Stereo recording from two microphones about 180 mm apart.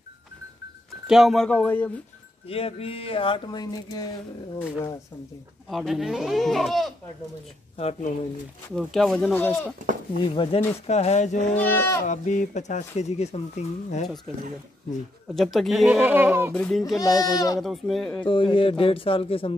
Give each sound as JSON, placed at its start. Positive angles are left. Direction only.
{"t": 1.0, "sound": "speech", "side_deg": 0}
{"t": 2.4, "sound": "speech", "side_deg": 30}
{"t": 5.7, "sound": "speech", "side_deg": 0}
{"t": 7.7, "sound": "speech", "side_deg": 35}
{"t": 8.7, "sound": "speech", "side_deg": 0}
{"t": 9.8, "sound": "speech", "side_deg": -45}
{"t": 10.3, "sound": "speech", "side_deg": 30}
{"t": 11.5, "sound": "speech", "side_deg": 10}
{"t": 12.1, "sound": "speech", "side_deg": 40}
{"t": 15.3, "sound": "speech", "side_deg": 0}
{"t": 16.5, "sound": "speech", "side_deg": 5}
{"t": 17.0, "sound": "a man's voice", "side_deg": 20}
{"t": 17.6, "sound": "speech", "side_deg": 0}
{"t": 18.2, "sound": "a man's voice", "side_deg": 30}